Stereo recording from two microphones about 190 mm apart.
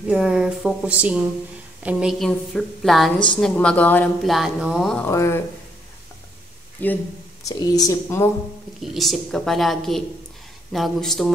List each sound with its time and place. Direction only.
0.1 s speech: 5° right (ahead or behind); by 5.4 s 15° left (ahead or behind)
6.8 s speech: 10° left (ahead or behind)
8.8 s speech: centre (ahead or behind)